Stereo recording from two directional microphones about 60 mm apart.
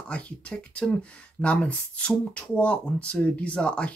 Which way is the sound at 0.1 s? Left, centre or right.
Centre.